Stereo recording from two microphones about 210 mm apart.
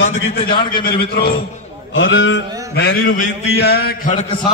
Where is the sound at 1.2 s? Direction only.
25° left (ahead or behind).